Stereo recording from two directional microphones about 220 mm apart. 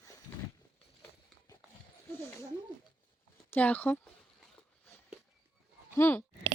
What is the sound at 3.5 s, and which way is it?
Speech, 5° left (ahead or behind).